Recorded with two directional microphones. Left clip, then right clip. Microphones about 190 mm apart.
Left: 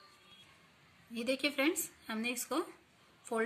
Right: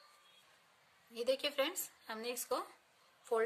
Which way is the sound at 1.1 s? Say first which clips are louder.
Left 1 dB; 30° right (ahead or behind).